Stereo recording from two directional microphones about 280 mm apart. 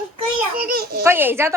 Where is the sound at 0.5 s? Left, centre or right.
Right.